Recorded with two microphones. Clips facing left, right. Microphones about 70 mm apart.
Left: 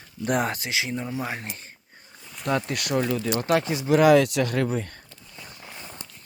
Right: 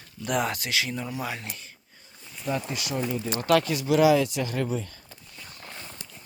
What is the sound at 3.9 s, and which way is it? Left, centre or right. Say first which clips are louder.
Speech: left 4 dB; left.